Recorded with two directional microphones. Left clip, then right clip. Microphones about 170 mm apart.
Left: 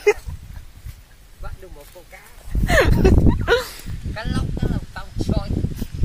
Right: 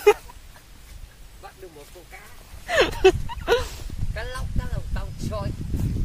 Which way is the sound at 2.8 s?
15° left (ahead or behind).